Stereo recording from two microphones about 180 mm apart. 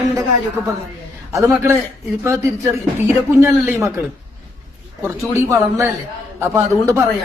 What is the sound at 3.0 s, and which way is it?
Speech, 15° right (ahead or behind).